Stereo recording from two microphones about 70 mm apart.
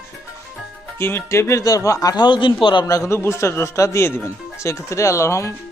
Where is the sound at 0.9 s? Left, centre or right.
Left.